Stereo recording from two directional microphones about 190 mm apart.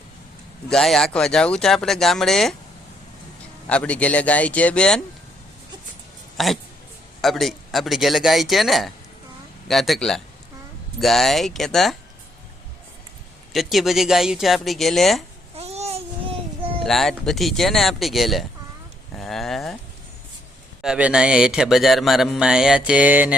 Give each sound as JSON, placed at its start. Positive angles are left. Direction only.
{"t": 0.7, "sound": "speech", "side_deg": 0}
{"t": 3.7, "sound": "speech", "side_deg": 5}
{"t": 6.3, "sound": "speech", "side_deg": 0}
{"t": 13.5, "sound": "speech", "side_deg": 0}
{"t": 15.5, "sound": "babbling", "side_deg": -35}
{"t": 16.8, "sound": "speech", "side_deg": 0}
{"t": 19.1, "sound": "a sound", "side_deg": 0}
{"t": 20.8, "sound": "speech", "side_deg": -5}